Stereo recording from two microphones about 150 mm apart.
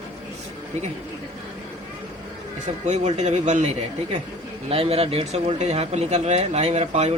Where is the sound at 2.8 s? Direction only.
50° right (ahead or behind).